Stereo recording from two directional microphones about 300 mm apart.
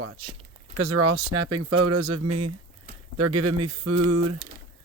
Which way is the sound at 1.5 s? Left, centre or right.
Right.